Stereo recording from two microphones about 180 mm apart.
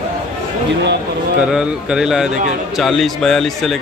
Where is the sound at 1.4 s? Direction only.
5° right (ahead or behind).